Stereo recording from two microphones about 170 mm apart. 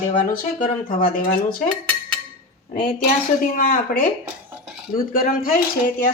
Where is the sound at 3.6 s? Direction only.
55° left (ahead or behind).